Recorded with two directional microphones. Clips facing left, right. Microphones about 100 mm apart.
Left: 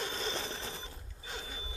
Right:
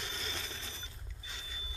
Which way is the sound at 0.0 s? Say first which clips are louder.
Left 6 dB; 35° left (ahead or behind).